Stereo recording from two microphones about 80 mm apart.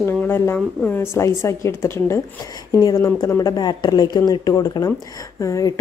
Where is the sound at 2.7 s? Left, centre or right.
Left.